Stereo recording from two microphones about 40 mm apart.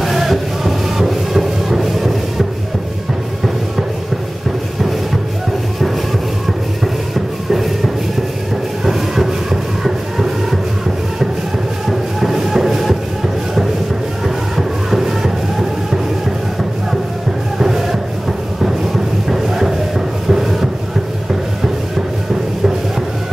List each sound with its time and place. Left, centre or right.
0.0 s music: centre
7.5 s shuffle: centre
8.8 s music: centre
11.9 s music: centre
14.2 s music: centre
17.6 s music: centre
18.6 s a sound: centre